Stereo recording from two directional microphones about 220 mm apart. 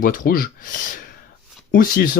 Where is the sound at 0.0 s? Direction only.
40° left (ahead or behind).